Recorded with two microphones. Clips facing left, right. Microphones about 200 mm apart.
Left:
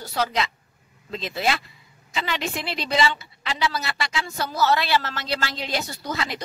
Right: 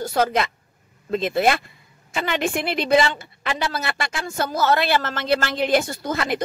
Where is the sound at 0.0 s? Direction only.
50° right (ahead or behind).